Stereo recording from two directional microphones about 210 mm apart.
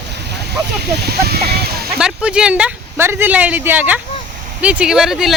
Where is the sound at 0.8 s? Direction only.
50° right (ahead or behind).